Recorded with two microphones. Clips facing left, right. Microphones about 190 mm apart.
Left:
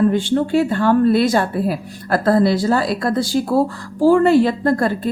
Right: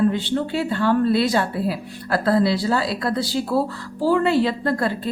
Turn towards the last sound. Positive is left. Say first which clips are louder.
# left 5 dB
turn(degrees=45)  # may be behind; listen again after turning